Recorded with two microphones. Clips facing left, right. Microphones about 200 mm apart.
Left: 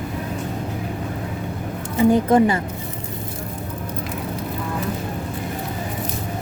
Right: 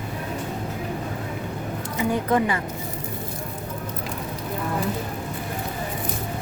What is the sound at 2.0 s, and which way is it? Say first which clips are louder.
Speech: left 7 dB; 30° left (ahead or behind).